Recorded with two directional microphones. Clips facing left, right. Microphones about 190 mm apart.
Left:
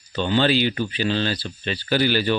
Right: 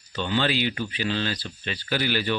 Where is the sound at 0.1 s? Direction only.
30° left (ahead or behind).